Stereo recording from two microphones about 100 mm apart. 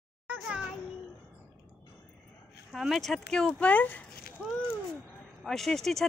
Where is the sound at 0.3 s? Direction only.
10° right (ahead or behind).